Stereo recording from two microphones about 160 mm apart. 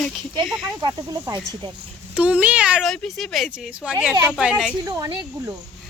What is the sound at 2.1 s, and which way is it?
Speech, 10° right (ahead or behind).